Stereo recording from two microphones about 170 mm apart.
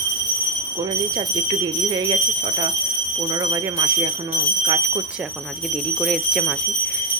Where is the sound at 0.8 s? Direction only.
25° right (ahead or behind).